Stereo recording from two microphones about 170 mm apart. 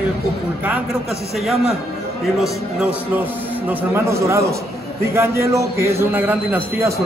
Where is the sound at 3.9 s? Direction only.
15° right (ahead or behind).